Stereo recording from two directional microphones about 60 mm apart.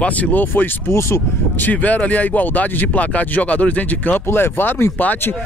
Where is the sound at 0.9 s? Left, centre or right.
Left.